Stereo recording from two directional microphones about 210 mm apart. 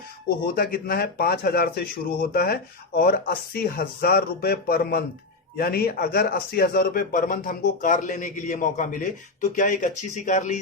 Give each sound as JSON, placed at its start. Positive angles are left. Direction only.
{"t": 0.5, "sound": "speech", "side_deg": 45}